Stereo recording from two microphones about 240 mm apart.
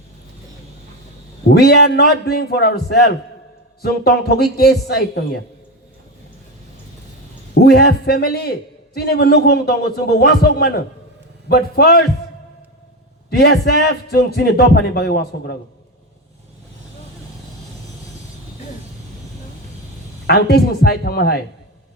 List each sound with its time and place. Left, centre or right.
1.5 s a man's voice: left
7.5 s a man's voice: left
13.3 s a man's voice: left
20.2 s a man's voice: left